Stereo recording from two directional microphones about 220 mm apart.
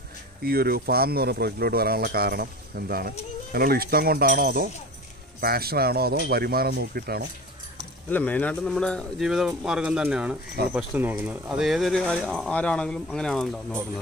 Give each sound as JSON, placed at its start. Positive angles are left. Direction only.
{"t": 0.4, "sound": "speech", "side_deg": -45}
{"t": 8.1, "sound": "speech", "side_deg": 5}